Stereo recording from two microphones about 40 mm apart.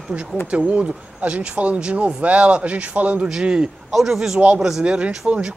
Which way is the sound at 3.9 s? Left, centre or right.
Centre.